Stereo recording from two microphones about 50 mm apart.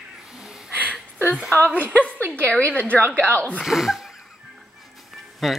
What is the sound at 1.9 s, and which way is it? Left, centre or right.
A woman's voice, left.